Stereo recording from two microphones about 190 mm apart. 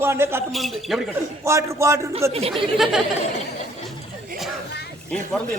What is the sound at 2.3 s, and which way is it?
Speech, 30° right (ahead or behind).